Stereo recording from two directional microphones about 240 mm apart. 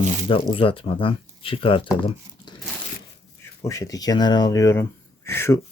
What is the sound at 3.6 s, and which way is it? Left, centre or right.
Speech, centre.